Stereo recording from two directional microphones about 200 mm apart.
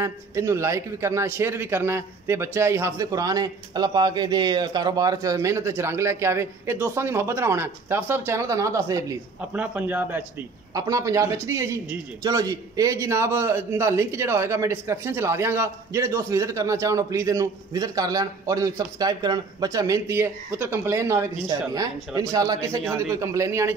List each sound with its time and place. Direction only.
0.0 s a man's voice: 15° right (ahead or behind)